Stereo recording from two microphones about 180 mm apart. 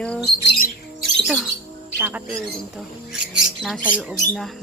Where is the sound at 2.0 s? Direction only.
5° right (ahead or behind).